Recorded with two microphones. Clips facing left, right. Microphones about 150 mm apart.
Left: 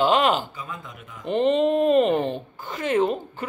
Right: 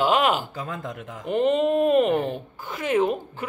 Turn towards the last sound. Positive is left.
turn(degrees=-10)  # may be behind; listen again after turning